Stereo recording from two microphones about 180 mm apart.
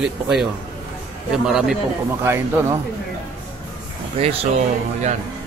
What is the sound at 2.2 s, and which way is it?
Speech, 15° right (ahead or behind).